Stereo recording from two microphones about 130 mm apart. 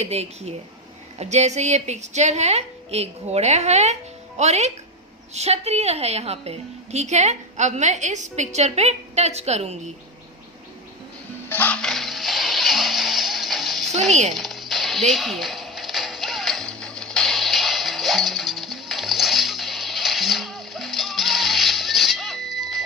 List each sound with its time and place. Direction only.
0.0 s a woman's voice: 55° right (ahead or behind)
11.4 s music: 15° left (ahead or behind)
14.1 s a woman's voice: 60° right (ahead or behind)
14.3 s music: centre (ahead or behind)